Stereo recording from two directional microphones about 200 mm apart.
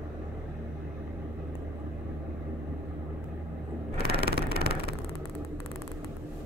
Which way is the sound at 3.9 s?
55° right (ahead or behind).